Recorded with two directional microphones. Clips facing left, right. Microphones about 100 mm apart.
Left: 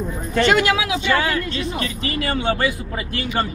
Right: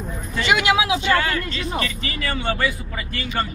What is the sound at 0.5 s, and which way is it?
Speech, 10° right (ahead or behind).